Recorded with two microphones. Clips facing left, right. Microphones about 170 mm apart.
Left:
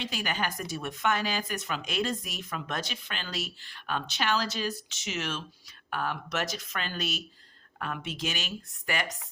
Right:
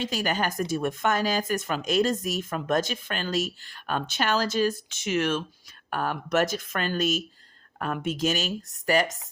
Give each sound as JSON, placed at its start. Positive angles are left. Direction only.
{"t": 0.0, "sound": "speech", "side_deg": -40}